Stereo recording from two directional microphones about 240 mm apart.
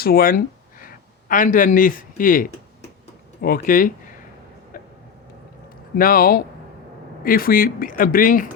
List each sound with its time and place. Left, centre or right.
0.0 s a sound: left
1.3 s speech: left
4.7 s vehicle: left
6.0 s speech: left